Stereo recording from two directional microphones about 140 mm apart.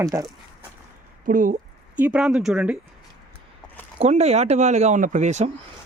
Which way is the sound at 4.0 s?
50° right (ahead or behind).